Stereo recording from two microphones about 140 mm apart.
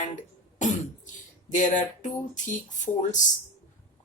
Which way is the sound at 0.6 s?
60° left (ahead or behind).